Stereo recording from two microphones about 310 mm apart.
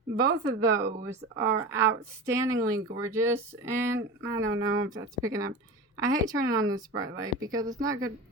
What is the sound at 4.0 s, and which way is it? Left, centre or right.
Speech, right.